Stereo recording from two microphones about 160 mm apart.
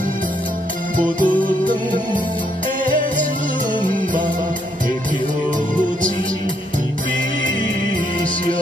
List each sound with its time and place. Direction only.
0.9 s music: 55° right (ahead or behind)
2.8 s music: 55° right (ahead or behind)